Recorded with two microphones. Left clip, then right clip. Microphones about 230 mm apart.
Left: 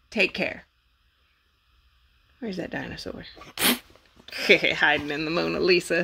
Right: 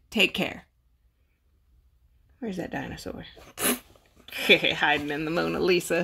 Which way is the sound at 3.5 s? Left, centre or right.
Left.